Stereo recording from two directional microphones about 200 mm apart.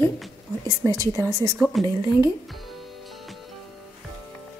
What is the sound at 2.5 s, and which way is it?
Music, centre (ahead or behind).